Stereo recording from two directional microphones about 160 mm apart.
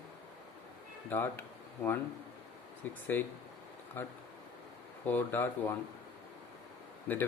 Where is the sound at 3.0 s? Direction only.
10° left (ahead or behind).